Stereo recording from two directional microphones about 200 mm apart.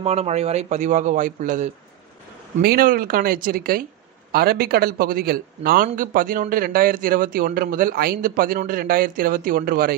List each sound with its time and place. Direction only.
0.0 s a man's voice: 30° right (ahead or behind)